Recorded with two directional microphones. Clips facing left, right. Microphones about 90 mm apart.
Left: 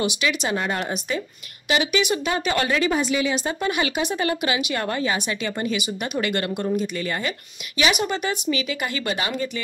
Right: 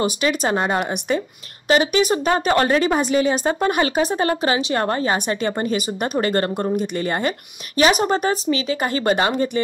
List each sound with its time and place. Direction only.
0.0 s a woman's voice: 45° right (ahead or behind)